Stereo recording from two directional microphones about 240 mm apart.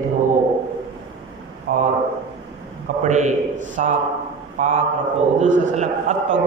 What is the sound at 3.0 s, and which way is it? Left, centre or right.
A man's voice, right.